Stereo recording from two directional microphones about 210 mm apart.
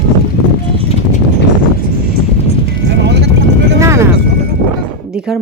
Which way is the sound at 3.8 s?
15° right (ahead or behind).